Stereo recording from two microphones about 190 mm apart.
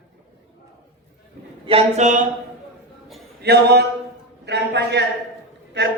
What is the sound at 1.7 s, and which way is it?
Speech, 35° right (ahead or behind).